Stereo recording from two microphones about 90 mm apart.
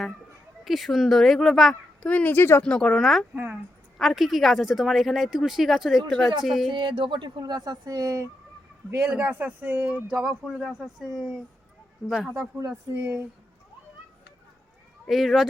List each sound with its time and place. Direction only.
0.6 s speech: centre (ahead or behind)
2.0 s speech: 15° left (ahead or behind)
2.3 s speech: 25° left (ahead or behind)
2.6 s speech: 10° left (ahead or behind)
3.3 s speech: 20° right (ahead or behind)
3.9 s speech: centre (ahead or behind)
6.7 s speech: 70° right (ahead or behind); by 8.3 s 40° right (ahead or behind)
9.0 s speech: 20° right (ahead or behind)
10.1 s speech: 10° right (ahead or behind)
12.5 s speech: 35° right (ahead or behind)
15.0 s speech: centre (ahead or behind)